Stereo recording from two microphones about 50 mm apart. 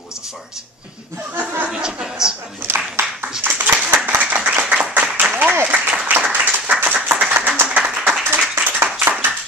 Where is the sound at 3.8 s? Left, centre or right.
Right.